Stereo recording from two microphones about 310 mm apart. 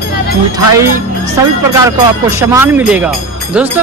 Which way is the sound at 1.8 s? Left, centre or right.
Centre.